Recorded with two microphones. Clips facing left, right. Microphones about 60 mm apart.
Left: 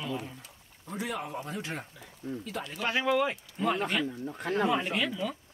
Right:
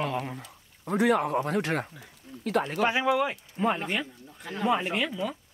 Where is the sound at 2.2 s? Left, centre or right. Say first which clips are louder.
Left 10 dB; left.